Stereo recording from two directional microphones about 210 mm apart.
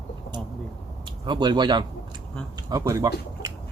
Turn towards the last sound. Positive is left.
turn(degrees=-15)  # may be behind; listen again after turning